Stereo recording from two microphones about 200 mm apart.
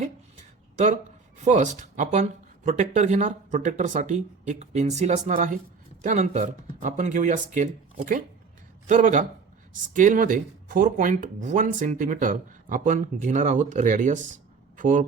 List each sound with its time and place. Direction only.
1.4 s speech: 35° right (ahead or behind)